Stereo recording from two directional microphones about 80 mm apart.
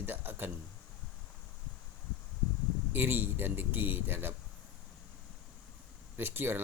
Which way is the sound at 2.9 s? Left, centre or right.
Right.